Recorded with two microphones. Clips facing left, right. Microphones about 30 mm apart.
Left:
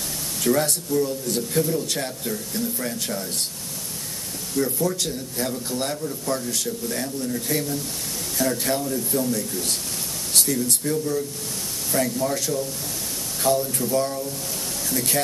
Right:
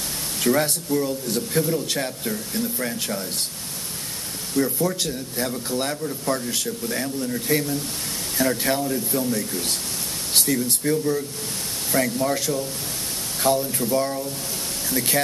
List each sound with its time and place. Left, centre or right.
0.4 s a man's voice: right
4.6 s a man's voice: centre